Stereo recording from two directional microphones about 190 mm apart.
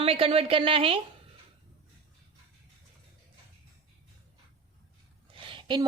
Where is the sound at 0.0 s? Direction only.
30° right (ahead or behind).